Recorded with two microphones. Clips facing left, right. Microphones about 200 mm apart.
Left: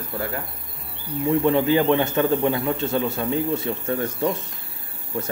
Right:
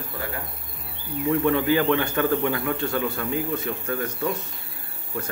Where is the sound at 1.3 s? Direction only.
25° left (ahead or behind).